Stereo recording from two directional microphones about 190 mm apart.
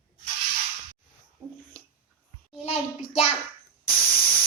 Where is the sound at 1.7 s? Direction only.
5° left (ahead or behind).